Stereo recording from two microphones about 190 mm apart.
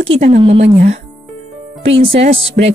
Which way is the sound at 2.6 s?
50° right (ahead or behind).